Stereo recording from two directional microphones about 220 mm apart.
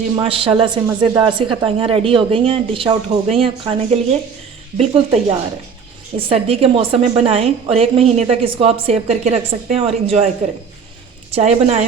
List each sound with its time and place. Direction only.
0.2 s a woman's voice: 25° right (ahead or behind)
11.3 s a woman's voice: 30° right (ahead or behind)